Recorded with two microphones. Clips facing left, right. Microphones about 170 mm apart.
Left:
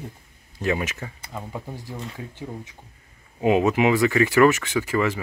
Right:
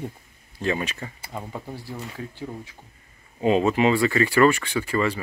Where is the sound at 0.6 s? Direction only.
10° left (ahead or behind).